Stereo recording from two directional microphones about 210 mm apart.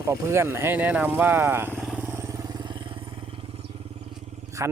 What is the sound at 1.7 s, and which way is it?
Vehicle, 5° right (ahead or behind).